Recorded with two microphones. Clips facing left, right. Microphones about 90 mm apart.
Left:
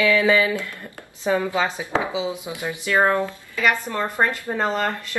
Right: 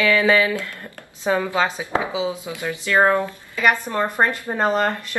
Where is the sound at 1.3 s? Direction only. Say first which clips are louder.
Right 1 dB; 20° right (ahead or behind).